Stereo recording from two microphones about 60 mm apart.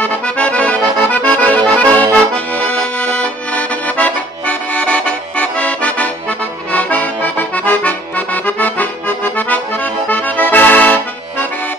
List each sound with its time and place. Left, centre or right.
0.0 s accordion: left